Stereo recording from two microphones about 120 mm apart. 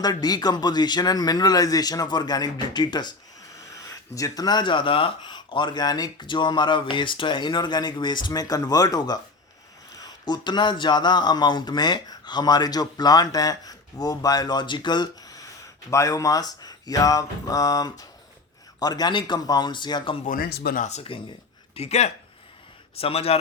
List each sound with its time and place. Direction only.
0.0 s speech: 35° left (ahead or behind)
21.1 s speech: 50° left (ahead or behind)
21.8 s a man's voice: 65° left (ahead or behind)